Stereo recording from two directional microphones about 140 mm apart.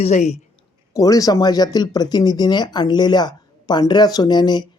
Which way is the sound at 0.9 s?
25° left (ahead or behind).